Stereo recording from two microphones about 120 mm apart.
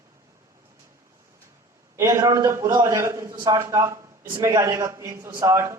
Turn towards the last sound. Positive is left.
turn(degrees=-25)  # may be behind; listen again after turning